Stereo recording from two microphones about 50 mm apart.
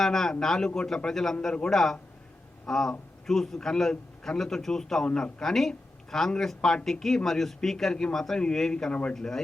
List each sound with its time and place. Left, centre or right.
0.0 s a man's voice: centre
8.9 s a man's voice: left
9.1 s a man's voice: centre